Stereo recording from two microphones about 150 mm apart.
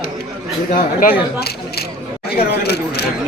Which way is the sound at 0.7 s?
65° left (ahead or behind).